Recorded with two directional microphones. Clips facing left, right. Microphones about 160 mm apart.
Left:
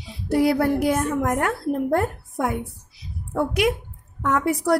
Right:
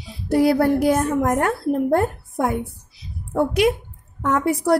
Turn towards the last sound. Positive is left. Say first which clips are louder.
# right 2 dB
turn(degrees=-30)  # may be behind; listen again after turning